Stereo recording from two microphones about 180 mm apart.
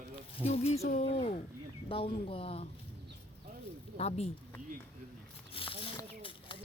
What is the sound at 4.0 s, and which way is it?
Speech, 35° left (ahead or behind).